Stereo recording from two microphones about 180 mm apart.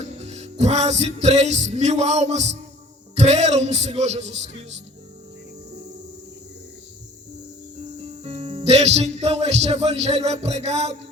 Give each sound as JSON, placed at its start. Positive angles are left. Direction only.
{"t": 0.2, "sound": "music", "side_deg": -40}
{"t": 8.0, "sound": "music", "side_deg": -35}